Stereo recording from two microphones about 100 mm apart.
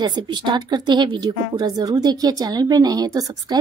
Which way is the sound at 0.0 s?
50° right (ahead or behind).